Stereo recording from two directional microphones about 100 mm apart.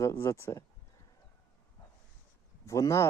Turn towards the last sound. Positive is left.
turn(degrees=30)  # may be behind; listen again after turning